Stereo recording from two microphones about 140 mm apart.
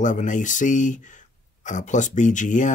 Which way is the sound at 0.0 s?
65° left (ahead or behind).